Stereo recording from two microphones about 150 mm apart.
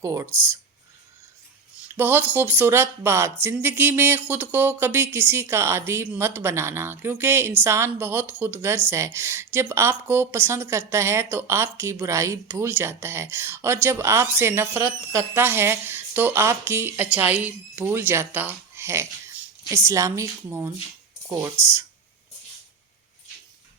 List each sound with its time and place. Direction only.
0.0 s a woman's voice: 20° right (ahead or behind)
2.0 s a woman's voice: 15° right (ahead or behind)